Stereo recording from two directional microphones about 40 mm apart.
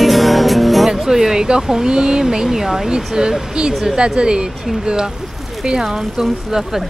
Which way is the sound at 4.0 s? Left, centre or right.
Right.